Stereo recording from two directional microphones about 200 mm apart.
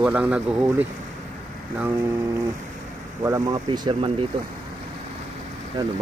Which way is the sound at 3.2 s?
20° right (ahead or behind).